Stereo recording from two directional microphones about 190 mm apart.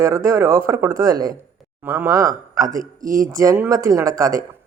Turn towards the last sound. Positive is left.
turn(degrees=-15)  # may be behind; listen again after turning